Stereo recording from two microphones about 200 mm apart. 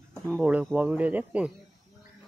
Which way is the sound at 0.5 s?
5° right (ahead or behind).